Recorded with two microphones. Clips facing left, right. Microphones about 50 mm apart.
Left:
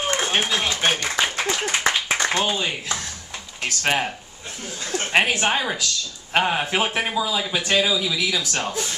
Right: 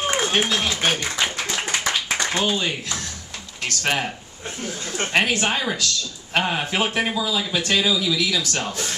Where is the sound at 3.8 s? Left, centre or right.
Centre.